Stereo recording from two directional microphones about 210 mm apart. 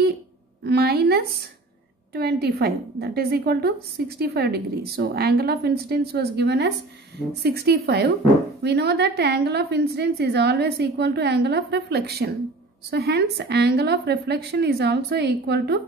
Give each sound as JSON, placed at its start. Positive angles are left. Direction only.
{"t": 0.7, "sound": "a woman's voice", "side_deg": -50}